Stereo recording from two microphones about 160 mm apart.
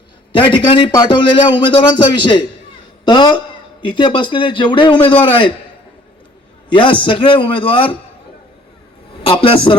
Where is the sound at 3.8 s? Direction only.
30° left (ahead or behind).